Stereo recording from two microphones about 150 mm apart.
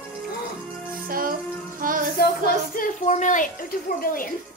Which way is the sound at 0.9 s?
70° right (ahead or behind).